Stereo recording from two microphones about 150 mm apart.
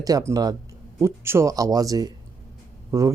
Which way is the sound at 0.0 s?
20° right (ahead or behind).